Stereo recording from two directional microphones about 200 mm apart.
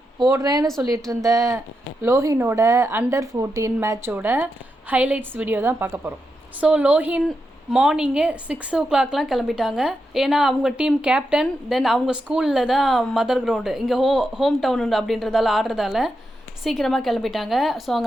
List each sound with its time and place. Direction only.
0.3 s a woman's voice: 15° right (ahead or behind); by 18.0 s centre (ahead or behind)